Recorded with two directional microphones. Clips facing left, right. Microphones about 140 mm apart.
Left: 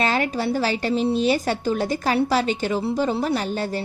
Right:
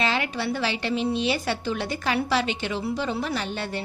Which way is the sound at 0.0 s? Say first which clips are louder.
Left 4 dB; 45° left (ahead or behind).